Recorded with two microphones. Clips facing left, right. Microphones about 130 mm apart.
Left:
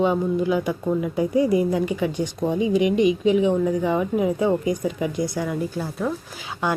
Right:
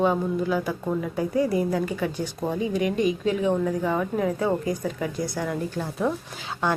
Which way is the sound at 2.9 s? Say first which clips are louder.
Left 5 dB; 45° right (ahead or behind).